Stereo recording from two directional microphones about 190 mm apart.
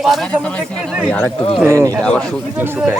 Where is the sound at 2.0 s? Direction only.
5° left (ahead or behind).